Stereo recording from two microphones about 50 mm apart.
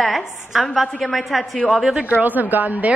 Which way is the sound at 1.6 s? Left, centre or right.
Centre.